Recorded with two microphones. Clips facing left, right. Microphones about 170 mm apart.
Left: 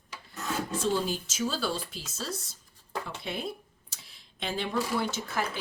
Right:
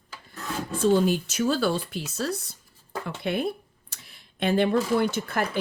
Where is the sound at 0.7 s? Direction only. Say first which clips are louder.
Right 10 dB; 60° right (ahead or behind).